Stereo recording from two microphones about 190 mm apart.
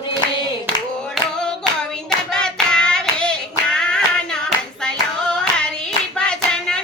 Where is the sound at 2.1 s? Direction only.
5° left (ahead or behind).